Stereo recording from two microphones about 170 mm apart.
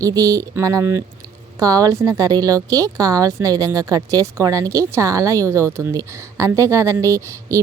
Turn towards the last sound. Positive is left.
turn(degrees=-15)  # may be behind; listen again after turning